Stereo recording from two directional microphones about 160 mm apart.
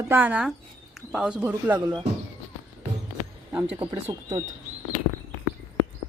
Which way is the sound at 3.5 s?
15° right (ahead or behind).